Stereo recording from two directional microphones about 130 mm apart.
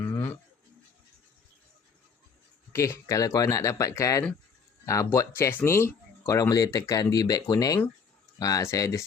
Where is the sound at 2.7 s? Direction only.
20° left (ahead or behind).